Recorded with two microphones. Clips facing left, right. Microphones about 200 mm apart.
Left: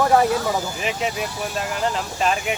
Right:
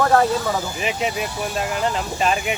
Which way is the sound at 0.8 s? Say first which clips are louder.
Right 1 dB; centre (ahead or behind).